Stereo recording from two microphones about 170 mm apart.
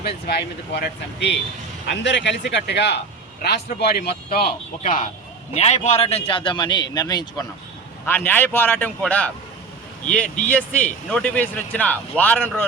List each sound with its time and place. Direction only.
0.3 s speech: 80° left
3.4 s speech: 75° left (ahead or behind)
4.8 s a man's voice: 50° left (ahead or behind); by 9.3 s 10° left (ahead or behind)
10.5 s speech: 10° left (ahead or behind)